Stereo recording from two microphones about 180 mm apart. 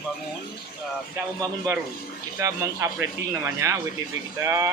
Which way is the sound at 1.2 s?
15° right (ahead or behind).